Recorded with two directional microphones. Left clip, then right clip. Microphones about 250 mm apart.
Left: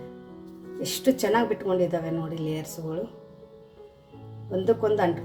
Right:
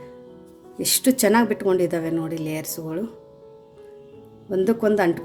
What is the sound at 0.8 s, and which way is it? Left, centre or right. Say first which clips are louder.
A woman's voice: right 4 dB; right.